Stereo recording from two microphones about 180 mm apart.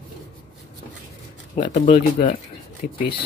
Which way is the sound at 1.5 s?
45° left (ahead or behind).